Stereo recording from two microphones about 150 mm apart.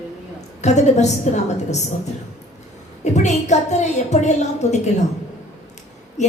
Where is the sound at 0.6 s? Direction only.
50° left (ahead or behind).